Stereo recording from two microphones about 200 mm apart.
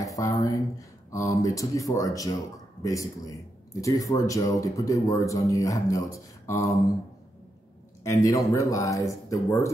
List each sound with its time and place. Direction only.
0.0 s speech: 15° left (ahead or behind)
8.0 s speech: 15° left (ahead or behind)